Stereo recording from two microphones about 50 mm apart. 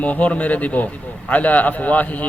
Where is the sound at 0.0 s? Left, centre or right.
Left.